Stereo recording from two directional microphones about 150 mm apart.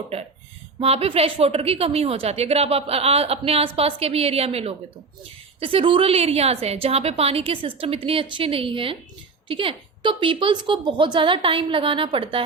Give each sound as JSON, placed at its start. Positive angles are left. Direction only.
{"t": 0.8, "sound": "a woman's voice", "side_deg": -40}